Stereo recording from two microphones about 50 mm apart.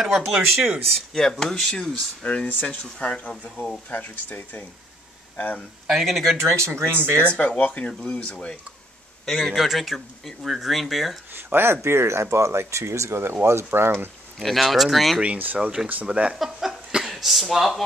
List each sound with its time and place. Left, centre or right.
0.0 s speech: centre
1.4 s speech: centre
2.2 s speech: left
5.9 s speech: centre
6.3 s speech: right
7.3 s speech: left
9.2 s speech: centre
11.3 s speech: right
14.4 s speech: centre
15.3 s speech: right
16.1 s speech: right; by 17.8 s centre